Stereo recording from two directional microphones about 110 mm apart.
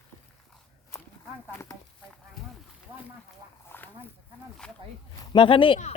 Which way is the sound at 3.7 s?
20° left (ahead or behind).